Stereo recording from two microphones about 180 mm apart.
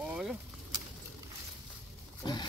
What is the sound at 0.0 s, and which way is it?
Vehicle, 5° right (ahead or behind).